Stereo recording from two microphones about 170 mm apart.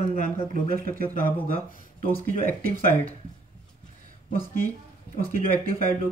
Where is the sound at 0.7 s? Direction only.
55° right (ahead or behind).